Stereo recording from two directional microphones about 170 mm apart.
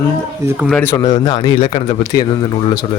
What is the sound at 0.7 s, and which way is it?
Speech, 10° left (ahead or behind).